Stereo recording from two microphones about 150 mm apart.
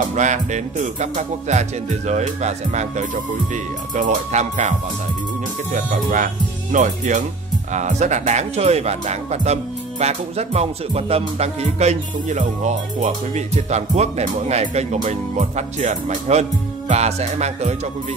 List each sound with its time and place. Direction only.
0.1 s speech: 55° right (ahead or behind)